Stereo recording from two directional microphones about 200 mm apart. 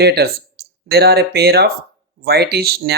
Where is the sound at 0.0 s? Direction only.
50° right (ahead or behind).